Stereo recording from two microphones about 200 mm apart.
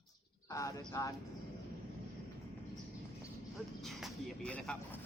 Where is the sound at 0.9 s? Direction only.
20° left (ahead or behind).